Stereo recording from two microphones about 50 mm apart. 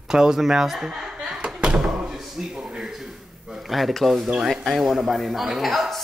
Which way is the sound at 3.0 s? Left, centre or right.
Centre.